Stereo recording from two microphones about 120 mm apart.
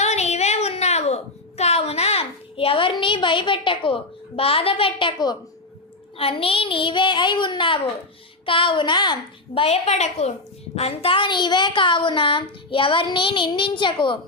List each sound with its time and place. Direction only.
0.0 s a sound: 65° left (ahead or behind); by 5.4 s 40° left (ahead or behind)
6.1 s a woman's voice: 50° left (ahead or behind)
9.6 s a woman's voice: 60° left (ahead or behind)
10.8 s a woman's voice: 55° left (ahead or behind)